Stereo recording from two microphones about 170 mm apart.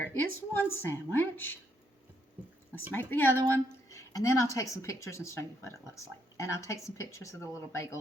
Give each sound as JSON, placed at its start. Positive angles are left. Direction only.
{"t": 0.0, "sound": "speech", "side_deg": 10}
{"t": 2.9, "sound": "speech", "side_deg": 10}